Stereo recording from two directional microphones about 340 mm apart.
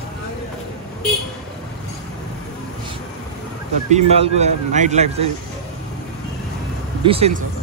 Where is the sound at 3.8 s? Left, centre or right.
Centre.